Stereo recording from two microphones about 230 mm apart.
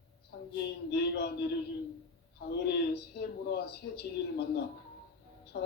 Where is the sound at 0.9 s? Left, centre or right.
Left.